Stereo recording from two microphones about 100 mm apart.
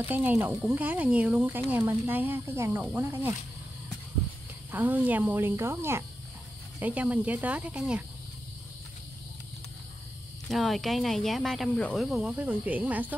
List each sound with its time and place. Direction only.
0.0 s speech: 15° right (ahead or behind)
4.6 s speech: 20° right (ahead or behind)
6.8 s speech: 15° right (ahead or behind)
10.5 s speech: centre (ahead or behind); by 13.1 s 15° right (ahead or behind)